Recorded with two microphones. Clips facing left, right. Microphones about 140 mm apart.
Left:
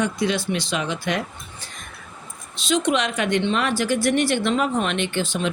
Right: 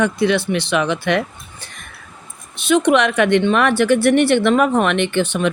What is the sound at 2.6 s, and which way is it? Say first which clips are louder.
Speech: right 7 dB; 60° right (ahead or behind).